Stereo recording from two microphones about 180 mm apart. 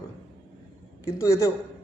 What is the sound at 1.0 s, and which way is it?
Speech, 15° left (ahead or behind).